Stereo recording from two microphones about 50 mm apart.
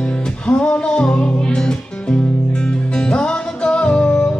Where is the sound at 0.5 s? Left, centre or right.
Left.